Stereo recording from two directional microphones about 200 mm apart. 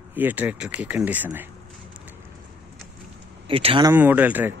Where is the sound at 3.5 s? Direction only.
25° right (ahead or behind).